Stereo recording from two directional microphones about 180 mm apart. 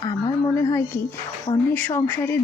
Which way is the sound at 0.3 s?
20° left (ahead or behind).